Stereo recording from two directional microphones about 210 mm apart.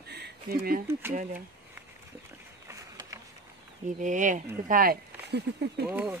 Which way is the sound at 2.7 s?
15° right (ahead or behind).